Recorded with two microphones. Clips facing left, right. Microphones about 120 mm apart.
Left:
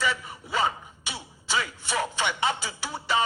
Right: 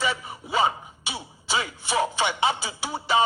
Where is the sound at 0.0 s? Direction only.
20° right (ahead or behind).